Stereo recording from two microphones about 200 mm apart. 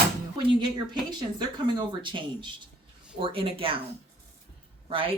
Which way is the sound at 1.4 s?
25° right (ahead or behind).